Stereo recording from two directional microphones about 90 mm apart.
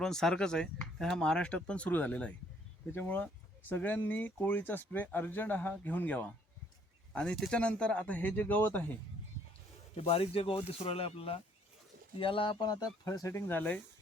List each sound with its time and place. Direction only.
0.0 s speech: 5° left (ahead or behind)
9.9 s speech: 90° left
12.1 s speech: 75° left (ahead or behind); by 13.3 s 45° left (ahead or behind)
13.3 s speech: 20° left (ahead or behind)